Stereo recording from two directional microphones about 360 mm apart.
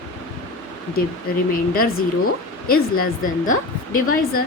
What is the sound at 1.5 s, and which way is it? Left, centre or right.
Speech, left.